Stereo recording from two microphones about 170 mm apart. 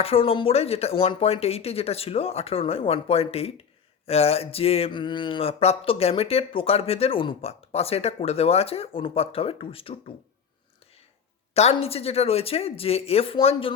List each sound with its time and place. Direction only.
0.0 s speech: 35° left (ahead or behind)
11.5 s speech: 40° left (ahead or behind)